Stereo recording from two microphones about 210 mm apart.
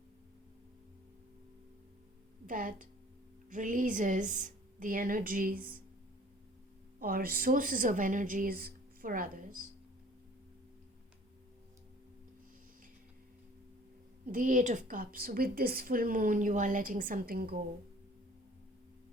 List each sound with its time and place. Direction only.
2.5 s a woman's voice: 40° right (ahead or behind)
7.0 s a woman's voice: 45° right (ahead or behind)
14.3 s a woman's voice: 40° right (ahead or behind)